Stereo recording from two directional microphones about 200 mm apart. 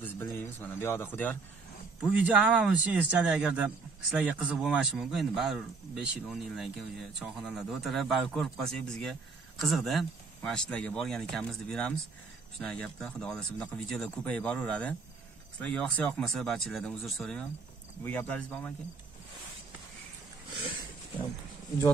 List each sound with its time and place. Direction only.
0.0 s speech: 10° left (ahead or behind)
2.0 s a man's voice: 5° right (ahead or behind)